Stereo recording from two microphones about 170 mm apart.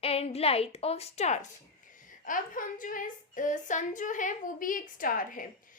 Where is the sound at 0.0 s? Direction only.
35° left (ahead or behind).